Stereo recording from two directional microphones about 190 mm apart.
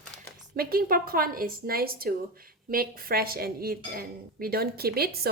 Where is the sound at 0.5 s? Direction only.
50° right (ahead or behind).